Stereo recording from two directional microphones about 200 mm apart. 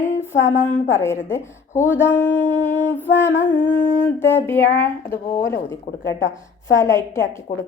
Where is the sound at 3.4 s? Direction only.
70° left (ahead or behind).